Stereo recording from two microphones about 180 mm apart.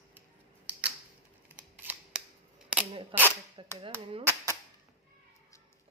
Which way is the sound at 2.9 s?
30° right (ahead or behind).